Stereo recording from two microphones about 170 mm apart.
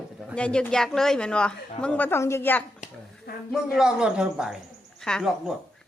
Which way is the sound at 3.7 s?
5° right (ahead or behind).